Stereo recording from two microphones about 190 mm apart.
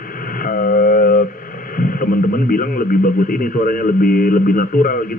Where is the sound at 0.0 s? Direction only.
50° left (ahead or behind).